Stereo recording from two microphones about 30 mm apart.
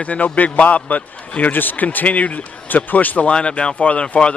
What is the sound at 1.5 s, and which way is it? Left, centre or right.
Speech, left.